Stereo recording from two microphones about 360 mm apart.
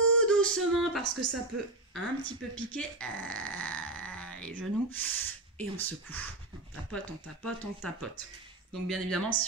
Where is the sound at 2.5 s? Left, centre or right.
Centre.